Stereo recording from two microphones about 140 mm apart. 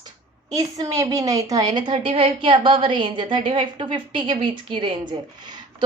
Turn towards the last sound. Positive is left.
turn(degrees=-35)  # may be behind; listen again after turning